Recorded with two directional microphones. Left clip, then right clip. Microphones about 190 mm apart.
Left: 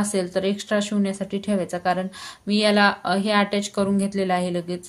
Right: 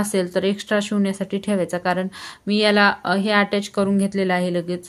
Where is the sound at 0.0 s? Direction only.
35° right (ahead or behind).